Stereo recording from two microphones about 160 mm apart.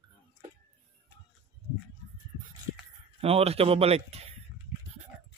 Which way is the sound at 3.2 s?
40° right (ahead or behind).